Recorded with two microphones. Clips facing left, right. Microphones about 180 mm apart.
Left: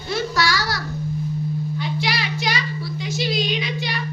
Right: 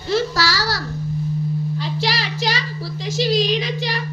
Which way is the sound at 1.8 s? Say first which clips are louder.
Right 1 dB; 35° right (ahead or behind).